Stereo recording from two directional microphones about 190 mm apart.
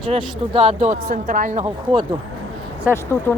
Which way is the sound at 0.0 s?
30° right (ahead or behind).